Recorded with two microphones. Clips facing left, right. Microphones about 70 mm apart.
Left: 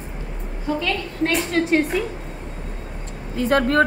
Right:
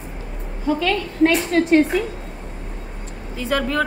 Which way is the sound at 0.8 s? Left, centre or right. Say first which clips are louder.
Right 9 dB; right.